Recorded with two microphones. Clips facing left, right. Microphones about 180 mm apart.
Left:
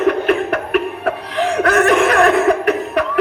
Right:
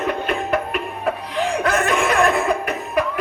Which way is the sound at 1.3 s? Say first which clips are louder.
Left 6 dB; 70° left (ahead or behind).